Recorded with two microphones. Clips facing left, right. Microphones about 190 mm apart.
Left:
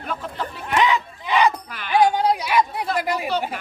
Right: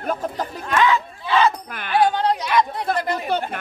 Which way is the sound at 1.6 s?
50° right (ahead or behind).